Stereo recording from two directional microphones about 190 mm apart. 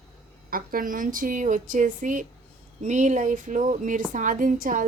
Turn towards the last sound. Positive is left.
turn(degrees=-45)  # may be behind; listen again after turning